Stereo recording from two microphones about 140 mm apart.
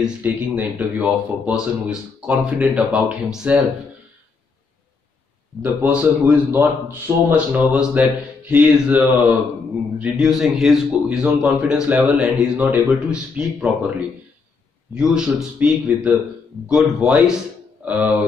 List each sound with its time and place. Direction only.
0.0 s a man's voice: 10° right (ahead or behind)
5.6 s a man's voice: 10° right (ahead or behind)
15.0 s a man's voice: 5° right (ahead or behind)